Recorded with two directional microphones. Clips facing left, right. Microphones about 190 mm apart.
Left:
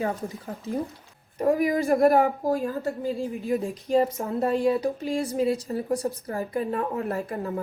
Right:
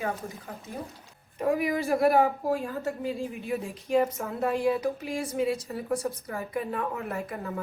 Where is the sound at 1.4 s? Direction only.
40° left (ahead or behind).